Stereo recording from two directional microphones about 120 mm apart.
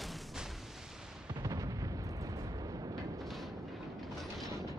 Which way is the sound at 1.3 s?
30° right (ahead or behind).